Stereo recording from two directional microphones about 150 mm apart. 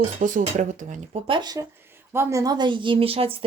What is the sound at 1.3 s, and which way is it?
Speech, 30° right (ahead or behind).